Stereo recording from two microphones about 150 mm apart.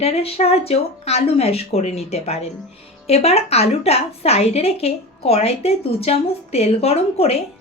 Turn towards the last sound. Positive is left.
turn(degrees=40)  # may be behind; listen again after turning